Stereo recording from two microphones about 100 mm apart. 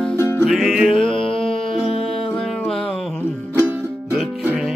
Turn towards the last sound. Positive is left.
turn(degrees=-15)  # may be behind; listen again after turning